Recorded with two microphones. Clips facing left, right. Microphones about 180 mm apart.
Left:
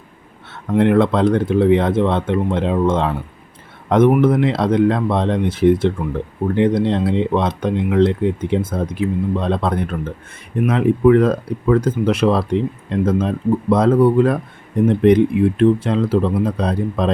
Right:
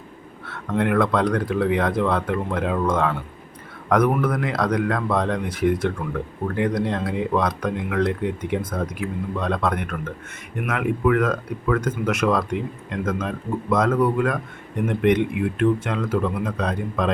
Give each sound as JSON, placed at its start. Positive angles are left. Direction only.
{"t": 0.8, "sound": "speech", "side_deg": 25}